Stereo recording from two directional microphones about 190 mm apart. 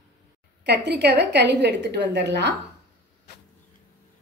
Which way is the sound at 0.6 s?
60° right (ahead or behind).